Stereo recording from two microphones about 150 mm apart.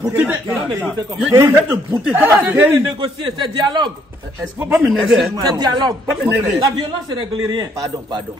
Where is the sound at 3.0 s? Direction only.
30° right (ahead or behind).